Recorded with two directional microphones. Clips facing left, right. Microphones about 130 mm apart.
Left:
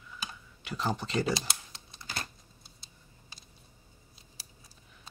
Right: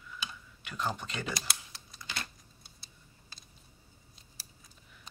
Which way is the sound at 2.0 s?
40° left (ahead or behind).